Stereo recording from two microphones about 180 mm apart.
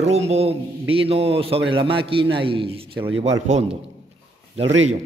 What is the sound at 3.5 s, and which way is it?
Speech, 40° right (ahead or behind).